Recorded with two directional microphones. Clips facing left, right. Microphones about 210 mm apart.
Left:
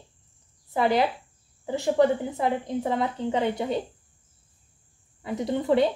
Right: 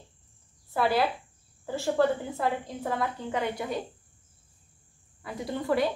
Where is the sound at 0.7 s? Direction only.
20° left (ahead or behind).